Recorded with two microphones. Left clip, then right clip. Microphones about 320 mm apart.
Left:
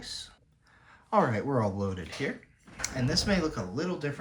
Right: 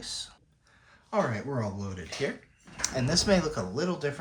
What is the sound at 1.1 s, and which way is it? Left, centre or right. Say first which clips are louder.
Speech: left 3 dB; centre.